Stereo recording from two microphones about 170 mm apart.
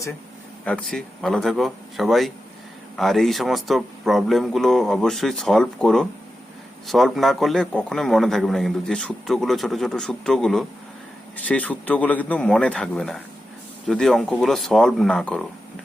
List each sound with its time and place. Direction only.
0.6 s a man's voice: 5° left (ahead or behind)